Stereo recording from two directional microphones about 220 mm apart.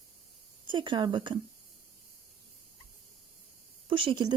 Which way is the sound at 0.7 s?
20° right (ahead or behind).